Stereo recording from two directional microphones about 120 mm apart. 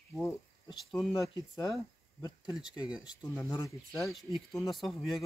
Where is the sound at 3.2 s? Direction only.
20° left (ahead or behind).